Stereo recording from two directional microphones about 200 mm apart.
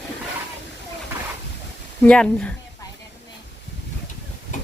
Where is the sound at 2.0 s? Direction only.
5° left (ahead or behind).